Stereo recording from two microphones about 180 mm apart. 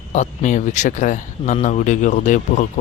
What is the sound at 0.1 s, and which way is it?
Speech, 40° left (ahead or behind).